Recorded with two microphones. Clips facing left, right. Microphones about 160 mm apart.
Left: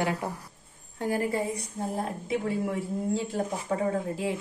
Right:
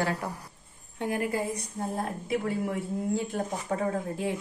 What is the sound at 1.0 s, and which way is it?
A woman's voice, 35° left (ahead or behind).